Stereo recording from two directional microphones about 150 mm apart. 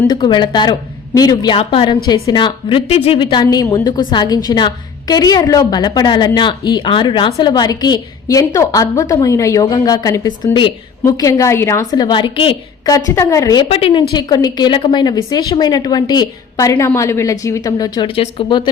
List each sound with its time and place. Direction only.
0.1 s a woman's voice: 30° left (ahead or behind)
1.5 s a woman's voice: 35° left (ahead or behind)
13.1 s a woman's voice: 20° left (ahead or behind)
13.7 s a woman's voice: 40° left (ahead or behind)
14.1 s a woman's voice: 25° left (ahead or behind)